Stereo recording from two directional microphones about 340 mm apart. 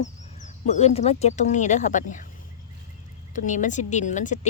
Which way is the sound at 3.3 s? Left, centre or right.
Left.